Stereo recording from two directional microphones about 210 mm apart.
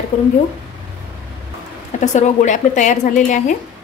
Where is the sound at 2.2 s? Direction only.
35° left (ahead or behind).